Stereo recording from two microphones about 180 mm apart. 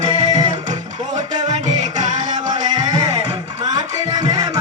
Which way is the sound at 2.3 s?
25° right (ahead or behind).